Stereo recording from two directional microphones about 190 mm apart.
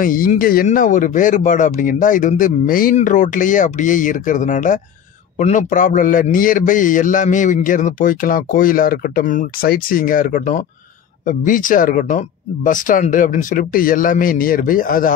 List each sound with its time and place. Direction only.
0.0 s a man's voice: 45° left (ahead or behind)